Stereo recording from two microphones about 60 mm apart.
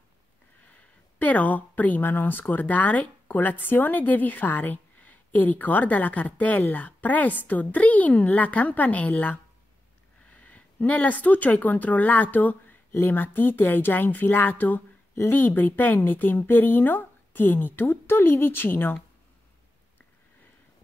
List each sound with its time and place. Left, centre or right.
0.7 s a woman's voice: left